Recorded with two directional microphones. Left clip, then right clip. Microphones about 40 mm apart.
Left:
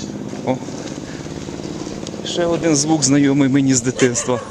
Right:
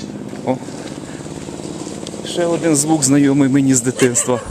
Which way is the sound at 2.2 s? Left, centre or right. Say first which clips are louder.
Right 1 dB; right.